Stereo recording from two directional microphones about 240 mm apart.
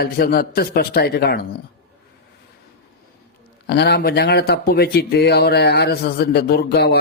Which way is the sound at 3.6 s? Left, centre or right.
Left.